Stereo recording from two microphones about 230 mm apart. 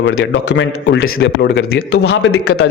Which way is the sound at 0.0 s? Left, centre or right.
Left.